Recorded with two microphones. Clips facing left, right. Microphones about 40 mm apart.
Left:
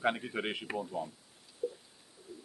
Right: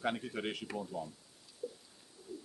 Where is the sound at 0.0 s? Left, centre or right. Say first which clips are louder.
Left 4 dB; left.